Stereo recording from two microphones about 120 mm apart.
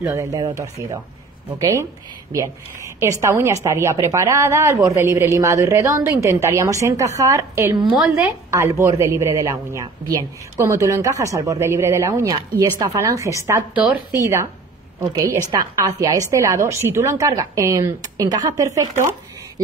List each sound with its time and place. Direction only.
0.0 s a woman's voice: 20° right (ahead or behind)
13.7 s a woman's voice: 10° right (ahead or behind)
14.1 s a woman's voice: 25° right (ahead or behind)